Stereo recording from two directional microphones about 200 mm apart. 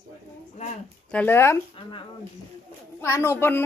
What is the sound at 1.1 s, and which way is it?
Speech, 10° left (ahead or behind).